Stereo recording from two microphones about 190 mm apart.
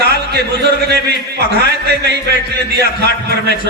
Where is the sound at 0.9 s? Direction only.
60° right (ahead or behind).